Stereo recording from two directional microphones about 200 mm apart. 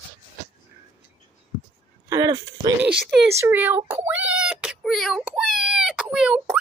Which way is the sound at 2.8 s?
Centre (ahead or behind).